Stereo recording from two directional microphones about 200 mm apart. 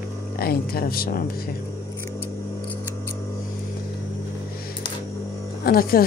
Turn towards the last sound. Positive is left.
turn(degrees=45)  # may be behind; listen again after turning